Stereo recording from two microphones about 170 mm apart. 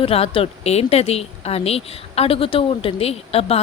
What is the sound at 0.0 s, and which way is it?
A woman's voice, 35° left (ahead or behind).